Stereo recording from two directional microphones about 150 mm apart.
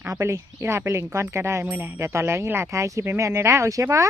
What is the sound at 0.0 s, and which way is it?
Speech, 20° right (ahead or behind).